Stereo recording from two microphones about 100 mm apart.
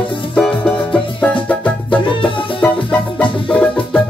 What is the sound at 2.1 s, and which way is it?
Music, 60° left (ahead or behind).